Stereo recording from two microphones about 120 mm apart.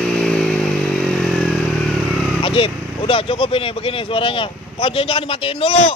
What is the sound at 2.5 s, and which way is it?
Vehicle, 45° left (ahead or behind).